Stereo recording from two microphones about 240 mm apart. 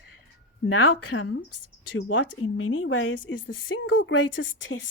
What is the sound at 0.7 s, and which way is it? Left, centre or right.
Speech, left.